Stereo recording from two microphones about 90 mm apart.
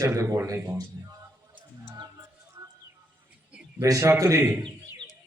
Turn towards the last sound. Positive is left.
turn(degrees=-30)  # may be behind; listen again after turning